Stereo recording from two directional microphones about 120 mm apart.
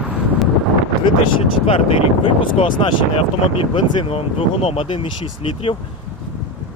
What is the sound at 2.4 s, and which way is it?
Speech, 45° left (ahead or behind).